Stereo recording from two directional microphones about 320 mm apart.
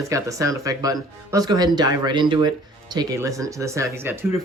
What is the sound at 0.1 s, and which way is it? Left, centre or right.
Speech, centre.